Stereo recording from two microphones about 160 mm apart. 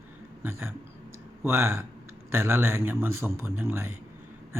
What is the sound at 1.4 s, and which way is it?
Speech, 15° right (ahead or behind).